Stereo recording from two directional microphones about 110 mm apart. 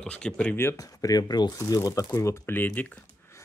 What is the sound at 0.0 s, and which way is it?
Speech, 10° left (ahead or behind).